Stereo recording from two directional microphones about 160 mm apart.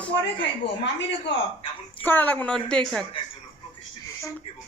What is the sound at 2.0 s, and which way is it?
Speech, 10° left (ahead or behind).